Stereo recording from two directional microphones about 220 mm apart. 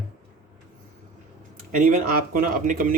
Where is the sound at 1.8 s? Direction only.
35° right (ahead or behind).